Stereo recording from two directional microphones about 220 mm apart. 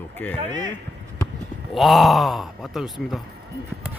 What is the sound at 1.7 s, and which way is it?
Speech, centre (ahead or behind).